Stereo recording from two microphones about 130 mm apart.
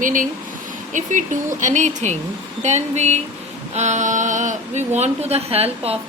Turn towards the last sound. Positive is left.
turn(degrees=-50)  # may be behind; listen again after turning